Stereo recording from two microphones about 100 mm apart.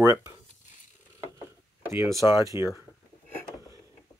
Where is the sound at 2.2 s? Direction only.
30° right (ahead or behind).